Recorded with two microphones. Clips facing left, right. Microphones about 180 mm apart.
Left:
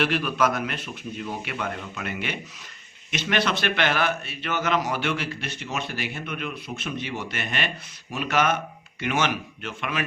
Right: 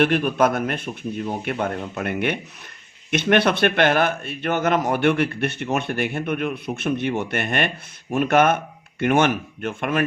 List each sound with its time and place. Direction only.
0.0 s a man's voice: 50° right (ahead or behind)